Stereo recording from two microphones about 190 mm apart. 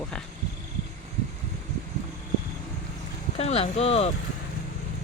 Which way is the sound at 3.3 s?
30° left (ahead or behind).